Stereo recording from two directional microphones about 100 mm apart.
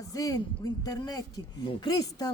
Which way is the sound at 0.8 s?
40° left (ahead or behind).